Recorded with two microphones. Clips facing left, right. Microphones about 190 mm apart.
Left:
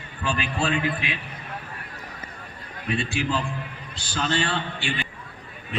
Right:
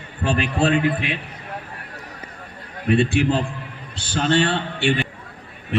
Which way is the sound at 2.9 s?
60° right (ahead or behind).